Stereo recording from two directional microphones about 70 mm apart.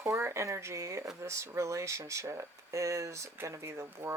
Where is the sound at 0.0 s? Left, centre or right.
Right.